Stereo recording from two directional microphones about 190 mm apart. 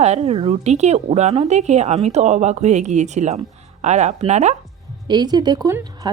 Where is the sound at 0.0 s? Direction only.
35° right (ahead or behind).